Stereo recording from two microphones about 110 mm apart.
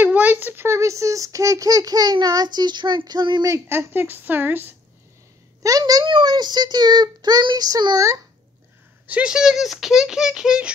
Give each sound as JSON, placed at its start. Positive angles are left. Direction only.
{"t": 0.0, "sound": "a child's voice", "side_deg": -15}
{"t": 3.4, "sound": "speech", "side_deg": -25}
{"t": 5.6, "sound": "a child's voice", "side_deg": -35}
{"t": 9.0, "sound": "speech", "side_deg": -10}